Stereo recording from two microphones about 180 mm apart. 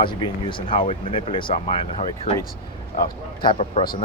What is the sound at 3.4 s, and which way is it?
Speech, 30° left (ahead or behind).